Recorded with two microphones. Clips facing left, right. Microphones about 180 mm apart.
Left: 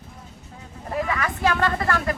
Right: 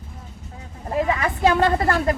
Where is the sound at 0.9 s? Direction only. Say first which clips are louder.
Right 4 dB; 25° right (ahead or behind).